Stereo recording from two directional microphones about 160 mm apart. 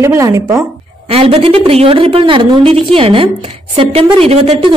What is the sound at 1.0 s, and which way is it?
A woman's voice, 35° right (ahead or behind).